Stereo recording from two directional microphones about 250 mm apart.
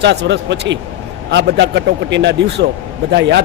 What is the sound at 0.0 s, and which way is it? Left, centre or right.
A man's voice, right.